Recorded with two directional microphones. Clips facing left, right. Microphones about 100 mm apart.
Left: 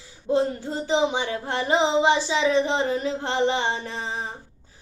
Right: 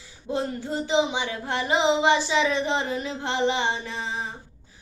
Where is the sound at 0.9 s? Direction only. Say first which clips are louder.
Left 2 dB; 40° left (ahead or behind).